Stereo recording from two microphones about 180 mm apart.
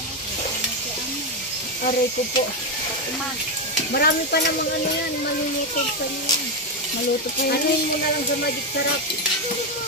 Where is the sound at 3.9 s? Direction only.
60° left (ahead or behind).